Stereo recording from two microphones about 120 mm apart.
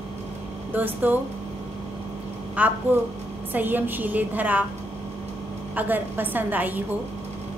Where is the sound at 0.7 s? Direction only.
15° right (ahead or behind).